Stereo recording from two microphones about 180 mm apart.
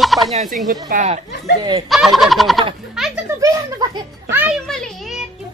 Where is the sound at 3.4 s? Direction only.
20° right (ahead or behind).